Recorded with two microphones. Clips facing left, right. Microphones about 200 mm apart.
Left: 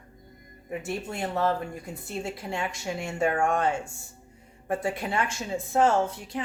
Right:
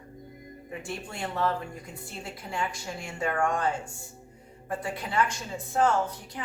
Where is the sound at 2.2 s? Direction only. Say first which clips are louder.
Even; 25° left (ahead or behind).